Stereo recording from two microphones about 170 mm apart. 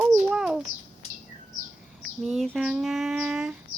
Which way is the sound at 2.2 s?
Centre (ahead or behind).